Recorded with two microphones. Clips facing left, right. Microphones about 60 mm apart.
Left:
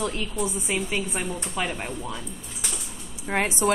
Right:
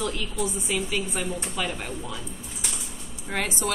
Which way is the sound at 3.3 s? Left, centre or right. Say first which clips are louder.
Left 5 dB; left.